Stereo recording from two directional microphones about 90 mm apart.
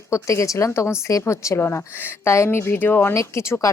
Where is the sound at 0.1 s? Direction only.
35° left (ahead or behind).